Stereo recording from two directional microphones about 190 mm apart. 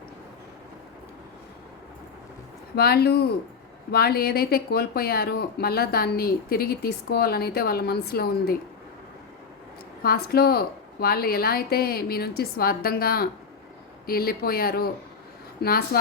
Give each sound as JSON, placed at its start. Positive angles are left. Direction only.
{"t": 2.7, "sound": "speech", "side_deg": 55}
{"t": 10.0, "sound": "speech", "side_deg": 55}